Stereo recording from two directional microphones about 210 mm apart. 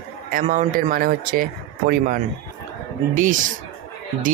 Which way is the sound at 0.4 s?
35° right (ahead or behind).